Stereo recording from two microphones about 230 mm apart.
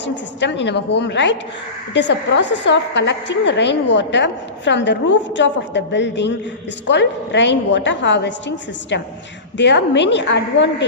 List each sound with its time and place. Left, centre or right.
0.0 s a woman's voice: left